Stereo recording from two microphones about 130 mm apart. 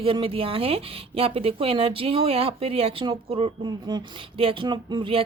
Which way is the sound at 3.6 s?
35° right (ahead or behind).